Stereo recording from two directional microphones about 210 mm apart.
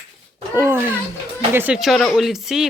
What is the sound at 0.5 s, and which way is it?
Speech, 10° right (ahead or behind).